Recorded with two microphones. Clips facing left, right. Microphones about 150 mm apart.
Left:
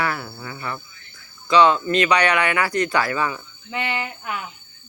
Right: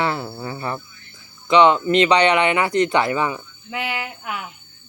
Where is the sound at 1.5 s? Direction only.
20° right (ahead or behind).